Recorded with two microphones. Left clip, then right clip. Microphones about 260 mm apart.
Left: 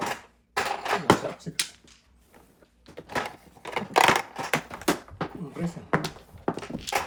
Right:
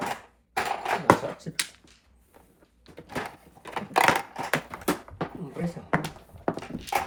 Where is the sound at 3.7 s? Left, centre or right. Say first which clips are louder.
Left 2 dB; centre.